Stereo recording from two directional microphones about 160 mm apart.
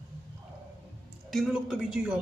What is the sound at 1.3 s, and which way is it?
Speech, centre (ahead or behind).